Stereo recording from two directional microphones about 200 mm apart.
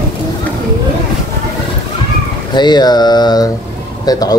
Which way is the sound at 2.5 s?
20° left (ahead or behind).